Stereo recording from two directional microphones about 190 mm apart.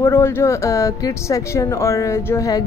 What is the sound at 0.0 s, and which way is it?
A woman's voice, 15° left (ahead or behind).